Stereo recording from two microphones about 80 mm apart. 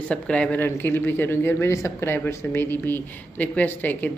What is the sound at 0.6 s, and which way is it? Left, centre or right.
Speech, left.